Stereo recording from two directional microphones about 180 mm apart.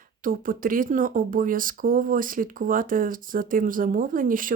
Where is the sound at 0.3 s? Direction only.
50° right (ahead or behind).